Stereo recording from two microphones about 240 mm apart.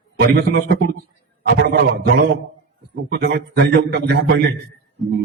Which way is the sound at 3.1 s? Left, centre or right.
Right.